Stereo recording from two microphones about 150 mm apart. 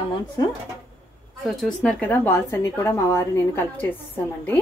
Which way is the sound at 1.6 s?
5° left (ahead or behind).